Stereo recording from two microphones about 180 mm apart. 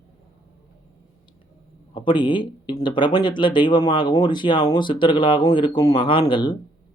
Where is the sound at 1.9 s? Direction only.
25° left (ahead or behind).